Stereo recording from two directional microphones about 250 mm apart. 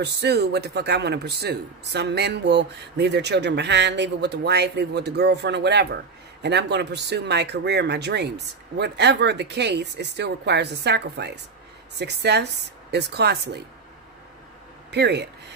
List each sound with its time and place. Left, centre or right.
0.0 s a man's voice: right
14.9 s a man's voice: right